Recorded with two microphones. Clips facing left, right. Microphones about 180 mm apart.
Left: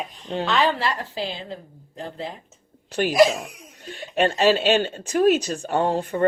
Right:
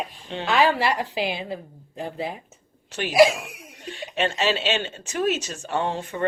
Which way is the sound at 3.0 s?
45° left (ahead or behind).